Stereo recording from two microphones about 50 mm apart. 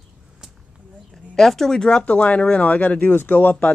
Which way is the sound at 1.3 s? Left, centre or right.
Centre.